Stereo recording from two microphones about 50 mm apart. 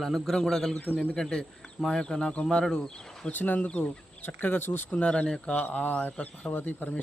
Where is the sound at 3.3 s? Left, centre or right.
Left.